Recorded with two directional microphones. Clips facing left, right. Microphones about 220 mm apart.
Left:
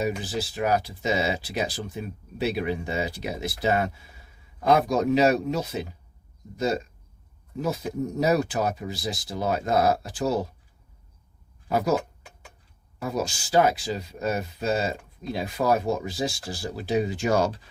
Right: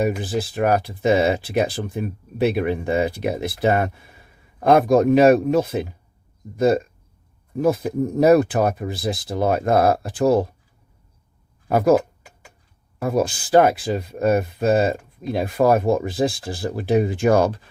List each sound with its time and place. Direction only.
0.0 s speech: 55° right (ahead or behind)
11.7 s speech: 55° right (ahead or behind)